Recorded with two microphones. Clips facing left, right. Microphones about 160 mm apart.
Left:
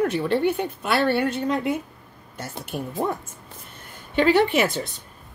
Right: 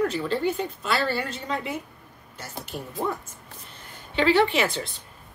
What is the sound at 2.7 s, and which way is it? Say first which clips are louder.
Speech: left 6 dB; 60° left (ahead or behind).